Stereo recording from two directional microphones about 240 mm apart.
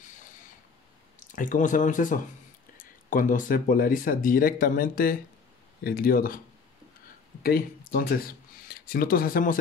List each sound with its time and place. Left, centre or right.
1.3 s speech: left
7.9 s speech: left